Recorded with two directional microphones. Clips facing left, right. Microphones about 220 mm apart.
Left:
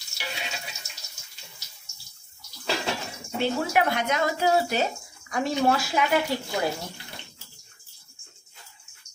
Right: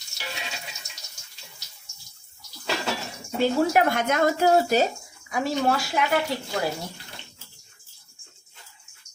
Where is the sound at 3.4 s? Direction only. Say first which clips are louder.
Right 4 dB; 45° right (ahead or behind).